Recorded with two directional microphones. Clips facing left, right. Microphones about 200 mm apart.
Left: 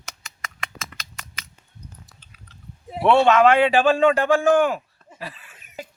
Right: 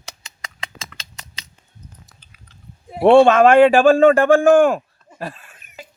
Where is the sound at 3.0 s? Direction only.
50° right (ahead or behind).